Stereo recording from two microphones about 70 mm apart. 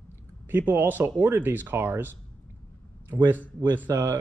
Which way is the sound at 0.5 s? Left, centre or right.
Right.